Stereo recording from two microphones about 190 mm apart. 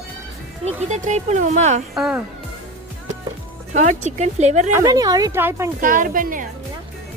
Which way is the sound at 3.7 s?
40° right (ahead or behind).